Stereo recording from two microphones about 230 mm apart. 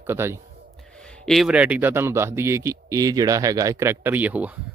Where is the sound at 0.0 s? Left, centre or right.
Centre.